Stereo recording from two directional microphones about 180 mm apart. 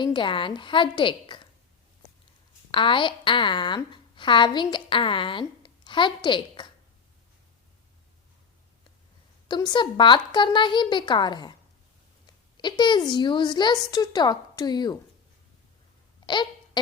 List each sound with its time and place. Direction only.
0.0 s a woman's voice: 25° left (ahead or behind)
2.7 s a woman's voice: 30° left (ahead or behind)
9.5 s a woman's voice: 25° left (ahead or behind)
16.2 s babbling: 25° left (ahead or behind)